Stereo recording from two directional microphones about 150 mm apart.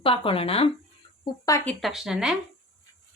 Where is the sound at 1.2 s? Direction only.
20° left (ahead or behind).